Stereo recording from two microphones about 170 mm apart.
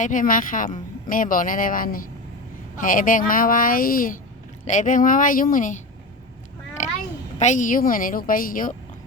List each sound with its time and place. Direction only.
0.0 s speech: 50° left (ahead or behind)
6.8 s a sound: 45° left (ahead or behind)
7.3 s speech: 45° left (ahead or behind)